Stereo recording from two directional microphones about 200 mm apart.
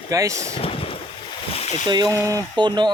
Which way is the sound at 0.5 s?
30° left (ahead or behind).